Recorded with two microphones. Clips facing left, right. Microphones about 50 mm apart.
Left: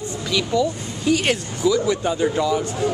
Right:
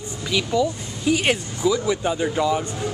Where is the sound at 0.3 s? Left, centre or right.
Centre.